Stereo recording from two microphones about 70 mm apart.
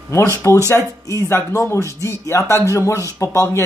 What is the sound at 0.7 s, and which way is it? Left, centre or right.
Speech, left.